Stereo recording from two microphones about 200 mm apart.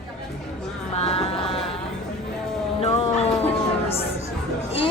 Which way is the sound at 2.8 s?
30° left (ahead or behind).